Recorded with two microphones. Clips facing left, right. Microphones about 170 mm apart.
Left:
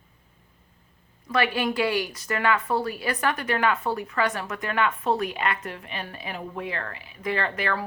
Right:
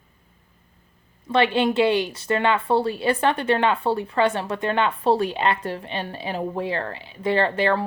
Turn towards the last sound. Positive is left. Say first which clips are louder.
# right 7 dB
turn(degrees=-30)  # may be behind; listen again after turning